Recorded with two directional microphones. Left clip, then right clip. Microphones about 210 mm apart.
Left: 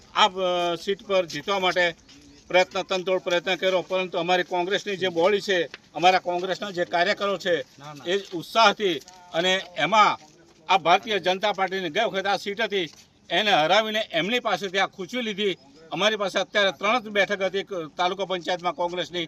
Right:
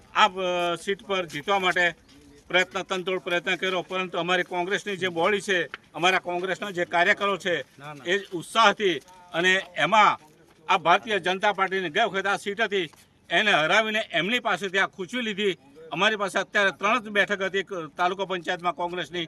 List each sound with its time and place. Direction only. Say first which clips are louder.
0.1 s speech: left 1 dB; centre (ahead or behind)